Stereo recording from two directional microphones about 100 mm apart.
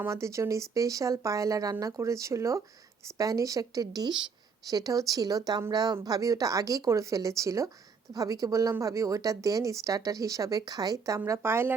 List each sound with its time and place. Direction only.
0.1 s a woman's voice: 30° right (ahead or behind)